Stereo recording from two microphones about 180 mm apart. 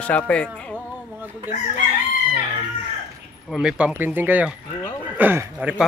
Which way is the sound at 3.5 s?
5° right (ahead or behind).